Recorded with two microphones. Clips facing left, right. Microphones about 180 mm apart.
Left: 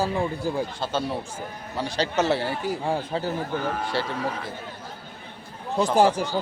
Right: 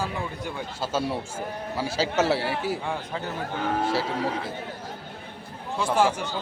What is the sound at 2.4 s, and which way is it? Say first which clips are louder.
Speech: even; 75° right (ahead or behind).